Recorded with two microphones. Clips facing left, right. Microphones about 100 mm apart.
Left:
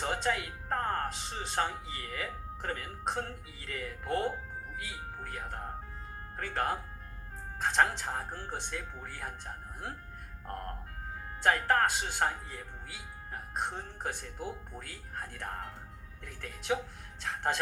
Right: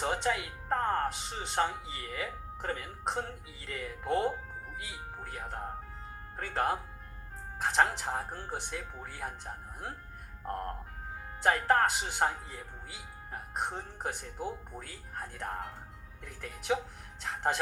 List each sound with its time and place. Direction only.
0.0 s speech: 25° right (ahead or behind)
4.1 s speech: 15° right (ahead or behind)
10.4 s speech: 20° right (ahead or behind)